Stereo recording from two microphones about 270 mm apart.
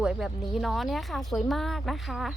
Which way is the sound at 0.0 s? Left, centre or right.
Centre.